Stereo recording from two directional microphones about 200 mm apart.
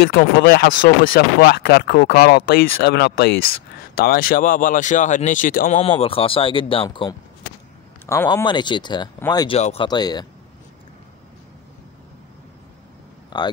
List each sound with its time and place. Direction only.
0.0 s speech: 50° left (ahead or behind)
5.8 s speech: 30° left (ahead or behind)
8.1 s speech: 15° left (ahead or behind)
9.6 s speech: 30° left (ahead or behind)
9.8 s speech: 20° left (ahead or behind)
13.3 s a man's voice: 20° left (ahead or behind)